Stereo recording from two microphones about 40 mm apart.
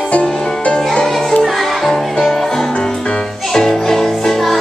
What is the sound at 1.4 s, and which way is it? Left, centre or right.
Music, centre.